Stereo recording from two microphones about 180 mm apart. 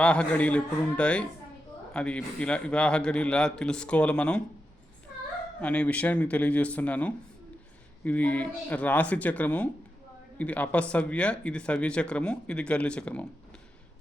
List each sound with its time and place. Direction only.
0.0 s a man's voice: 5° left (ahead or behind)
5.5 s speech: 5° left (ahead or behind)